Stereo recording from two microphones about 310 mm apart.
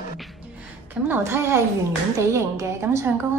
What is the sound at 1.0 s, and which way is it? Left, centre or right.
A woman's voice, centre.